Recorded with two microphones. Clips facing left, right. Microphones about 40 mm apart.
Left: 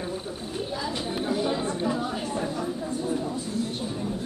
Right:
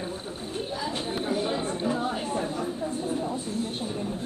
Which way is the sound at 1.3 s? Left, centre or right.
Centre.